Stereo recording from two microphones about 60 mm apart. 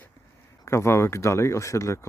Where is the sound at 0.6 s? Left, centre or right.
Left.